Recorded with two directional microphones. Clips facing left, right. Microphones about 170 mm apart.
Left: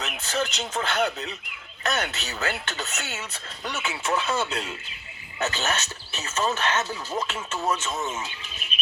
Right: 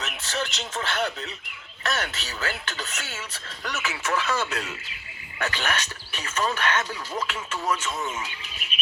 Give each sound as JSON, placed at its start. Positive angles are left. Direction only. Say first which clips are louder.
{"t": 0.0, "sound": "speech", "louder": "left 3 dB", "side_deg": 35}
{"t": 2.0, "sound": "speech", "louder": "left 2 dB", "side_deg": 20}